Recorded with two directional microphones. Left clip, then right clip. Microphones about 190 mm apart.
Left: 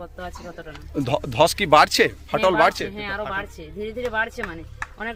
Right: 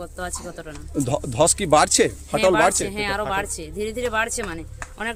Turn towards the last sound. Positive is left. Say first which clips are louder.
# right 1 dB
turn(degrees=-25)  # may be behind; listen again after turning